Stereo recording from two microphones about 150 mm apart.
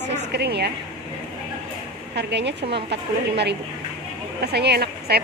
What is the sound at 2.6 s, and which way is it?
Speech, 75° right (ahead or behind).